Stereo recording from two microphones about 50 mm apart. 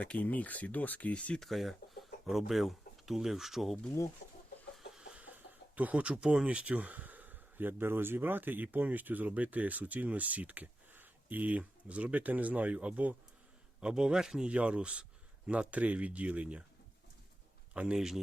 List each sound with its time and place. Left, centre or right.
0.0 s speech: left
1.4 s speech: centre
5.1 s speech: right
13.8 s a man's voice: centre
14.4 s speech: right
17.9 s a man's voice: centre